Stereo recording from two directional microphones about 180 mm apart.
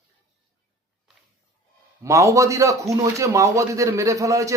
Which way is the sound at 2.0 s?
15° right (ahead or behind).